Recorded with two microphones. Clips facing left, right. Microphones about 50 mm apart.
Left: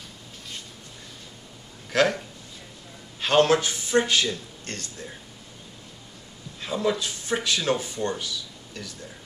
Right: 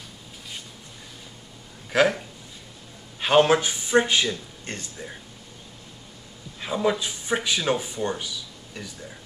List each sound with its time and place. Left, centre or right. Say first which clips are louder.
1.9 s a man's voice: right 1 dB; centre
6.6 s speech: right 1 dB; centre